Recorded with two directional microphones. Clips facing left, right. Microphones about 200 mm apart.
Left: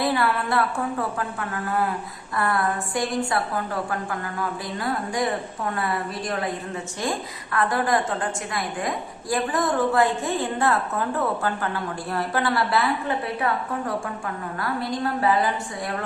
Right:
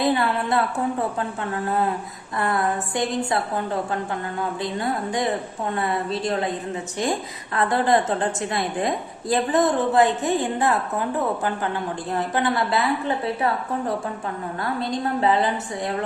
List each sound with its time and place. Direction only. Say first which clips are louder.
0.0 s a woman's voice: right 2 dB; 20° right (ahead or behind)